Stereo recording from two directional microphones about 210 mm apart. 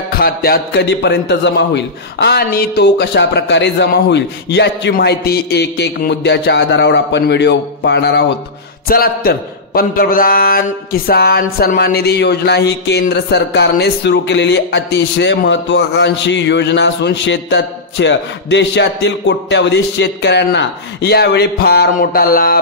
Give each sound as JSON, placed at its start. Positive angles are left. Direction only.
{"t": 0.2, "sound": "a man's voice", "side_deg": 50}